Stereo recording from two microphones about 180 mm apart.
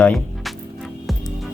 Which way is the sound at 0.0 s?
5° left (ahead or behind).